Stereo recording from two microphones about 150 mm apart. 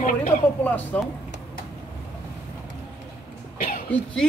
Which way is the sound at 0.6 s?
10° left (ahead or behind).